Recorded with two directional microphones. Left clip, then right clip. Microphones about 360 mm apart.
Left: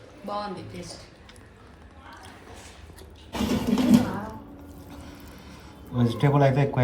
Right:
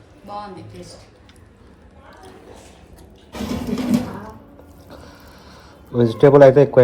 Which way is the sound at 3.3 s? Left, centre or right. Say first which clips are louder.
Even; centre.